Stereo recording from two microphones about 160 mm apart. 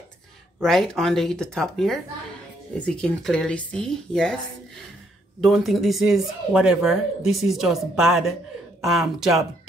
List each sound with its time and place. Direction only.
0.6 s speech: centre (ahead or behind)
5.4 s speech: centre (ahead or behind)